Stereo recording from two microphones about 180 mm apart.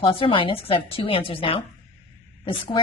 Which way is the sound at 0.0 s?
30° left (ahead or behind).